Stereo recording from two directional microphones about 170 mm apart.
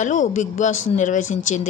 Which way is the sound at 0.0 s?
45° left (ahead or behind).